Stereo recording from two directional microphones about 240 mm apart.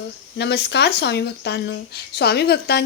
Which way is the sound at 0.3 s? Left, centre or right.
Left.